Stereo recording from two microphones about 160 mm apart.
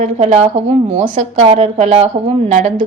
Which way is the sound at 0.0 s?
55° right (ahead or behind).